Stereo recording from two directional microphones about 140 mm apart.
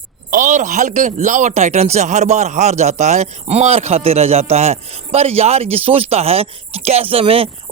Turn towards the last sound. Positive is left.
turn(degrees=-40)  # may be behind; listen again after turning